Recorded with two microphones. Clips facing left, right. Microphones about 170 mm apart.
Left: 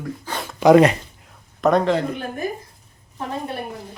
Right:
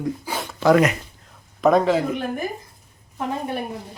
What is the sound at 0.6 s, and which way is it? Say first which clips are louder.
Speech: left 4 dB; 15° left (ahead or behind).